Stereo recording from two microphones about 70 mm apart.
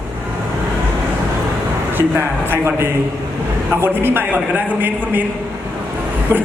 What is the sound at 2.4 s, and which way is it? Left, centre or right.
Speech, right.